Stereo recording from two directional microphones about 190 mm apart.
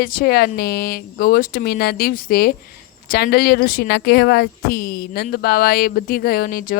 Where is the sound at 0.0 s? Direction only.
50° left (ahead or behind).